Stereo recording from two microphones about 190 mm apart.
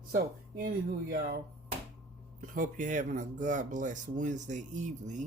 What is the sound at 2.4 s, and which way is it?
Speech, 45° right (ahead or behind).